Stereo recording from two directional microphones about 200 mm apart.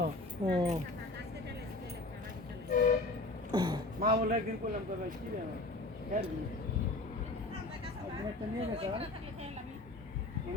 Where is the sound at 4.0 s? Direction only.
45° right (ahead or behind).